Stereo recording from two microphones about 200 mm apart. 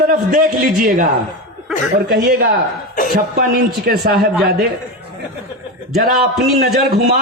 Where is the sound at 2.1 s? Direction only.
45° right (ahead or behind).